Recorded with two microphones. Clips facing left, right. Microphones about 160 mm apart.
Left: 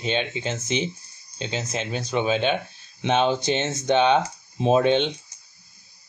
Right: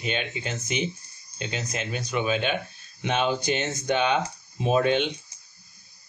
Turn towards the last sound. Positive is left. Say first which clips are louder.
# left 3 dB
turn(degrees=25)  # may be behind; listen again after turning